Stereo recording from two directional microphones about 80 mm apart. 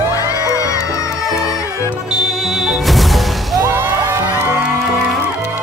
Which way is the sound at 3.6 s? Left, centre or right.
Right.